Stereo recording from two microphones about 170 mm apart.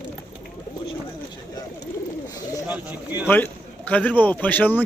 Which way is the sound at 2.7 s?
10° right (ahead or behind).